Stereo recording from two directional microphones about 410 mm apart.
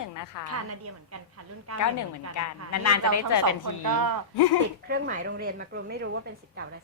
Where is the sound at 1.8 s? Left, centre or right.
Left.